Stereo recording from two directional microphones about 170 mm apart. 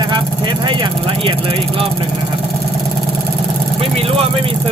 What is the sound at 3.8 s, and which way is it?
Vehicle, 35° right (ahead or behind).